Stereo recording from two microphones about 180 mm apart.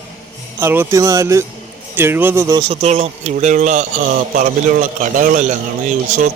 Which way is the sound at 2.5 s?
30° right (ahead or behind).